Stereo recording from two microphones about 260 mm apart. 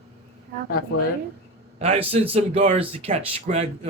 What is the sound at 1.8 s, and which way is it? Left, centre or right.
A man's voice, right.